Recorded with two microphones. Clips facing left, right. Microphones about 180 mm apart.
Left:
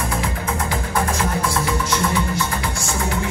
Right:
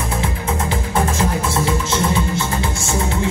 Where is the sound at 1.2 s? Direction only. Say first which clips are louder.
Right 2 dB; 25° right (ahead or behind).